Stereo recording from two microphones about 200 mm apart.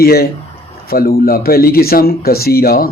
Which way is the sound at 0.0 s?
50° left (ahead or behind).